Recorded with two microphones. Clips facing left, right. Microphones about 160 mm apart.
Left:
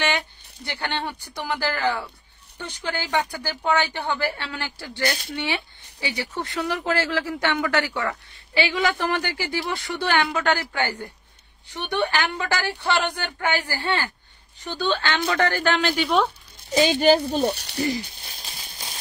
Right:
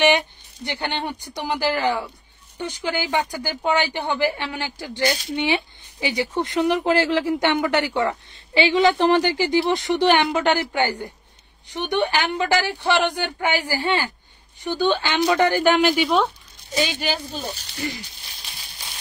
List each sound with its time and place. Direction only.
0.7 s speech: 15° right (ahead or behind)
17.5 s speech: 70° left (ahead or behind)
17.7 s speech: 35° left (ahead or behind)
18.2 s a sound: 35° left (ahead or behind)